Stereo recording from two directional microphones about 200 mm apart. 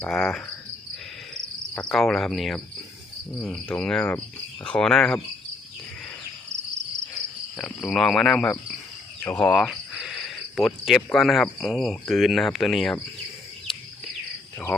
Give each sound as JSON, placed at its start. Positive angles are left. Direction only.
{"t": 0.0, "sound": "speech", "side_deg": 5}
{"t": 1.3, "sound": "cricket", "side_deg": 5}
{"t": 3.3, "sound": "speech", "side_deg": 0}
{"t": 7.5, "sound": "speech", "side_deg": 0}
{"t": 9.2, "sound": "cricket", "side_deg": 10}
{"t": 10.8, "sound": "speech", "side_deg": 0}